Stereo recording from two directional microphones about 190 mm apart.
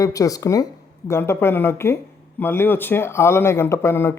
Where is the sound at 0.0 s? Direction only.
15° left (ahead or behind).